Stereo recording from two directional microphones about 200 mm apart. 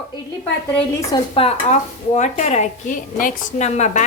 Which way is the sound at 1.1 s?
25° left (ahead or behind).